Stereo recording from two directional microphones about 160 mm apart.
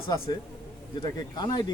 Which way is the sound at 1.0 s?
25° left (ahead or behind).